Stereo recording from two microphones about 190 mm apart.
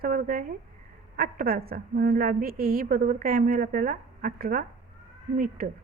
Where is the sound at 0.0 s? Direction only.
50° right (ahead or behind).